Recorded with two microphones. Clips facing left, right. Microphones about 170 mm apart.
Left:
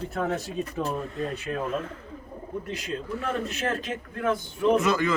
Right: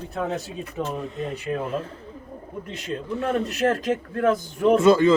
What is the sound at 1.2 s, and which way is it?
Speech, 30° right (ahead or behind).